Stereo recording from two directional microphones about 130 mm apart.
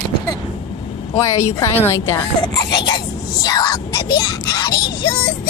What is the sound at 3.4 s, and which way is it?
Speech, 30° left (ahead or behind).